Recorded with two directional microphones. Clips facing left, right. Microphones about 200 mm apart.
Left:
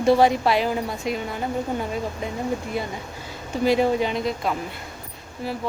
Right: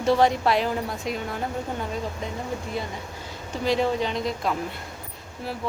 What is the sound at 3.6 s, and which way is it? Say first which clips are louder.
A woman's voice: left 4 dB; 10° left (ahead or behind).